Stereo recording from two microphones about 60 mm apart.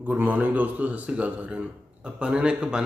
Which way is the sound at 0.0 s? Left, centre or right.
Right.